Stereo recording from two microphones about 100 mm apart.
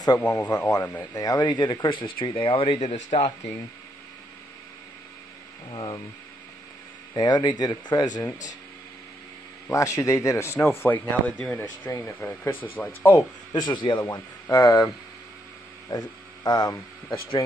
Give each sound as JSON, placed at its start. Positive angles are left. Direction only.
{"t": 0.2, "sound": "speech", "side_deg": 15}
{"t": 1.1, "sound": "speech", "side_deg": 40}
{"t": 5.7, "sound": "speech", "side_deg": 40}
{"t": 7.2, "sound": "speech", "side_deg": 45}
{"t": 9.7, "sound": "speech", "side_deg": 30}
{"t": 13.5, "sound": "speech", "side_deg": 50}
{"t": 14.5, "sound": "speech", "side_deg": 35}
{"t": 15.9, "sound": "speech", "side_deg": 40}